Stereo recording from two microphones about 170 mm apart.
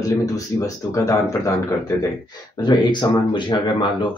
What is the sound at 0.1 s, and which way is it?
Speech, 20° left (ahead or behind).